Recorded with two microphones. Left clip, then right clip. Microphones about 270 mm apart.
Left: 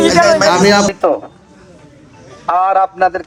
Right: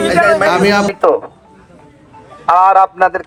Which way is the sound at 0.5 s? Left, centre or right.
Centre.